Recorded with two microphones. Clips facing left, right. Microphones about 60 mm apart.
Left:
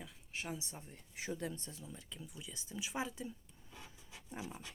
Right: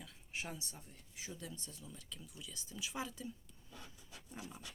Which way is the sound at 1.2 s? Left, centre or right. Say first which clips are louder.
Left 7 dB; left.